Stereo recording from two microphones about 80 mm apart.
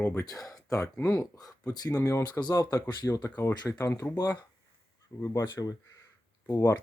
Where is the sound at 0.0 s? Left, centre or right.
Left.